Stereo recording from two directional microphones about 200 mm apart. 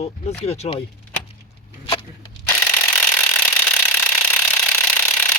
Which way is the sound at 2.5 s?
10° left (ahead or behind).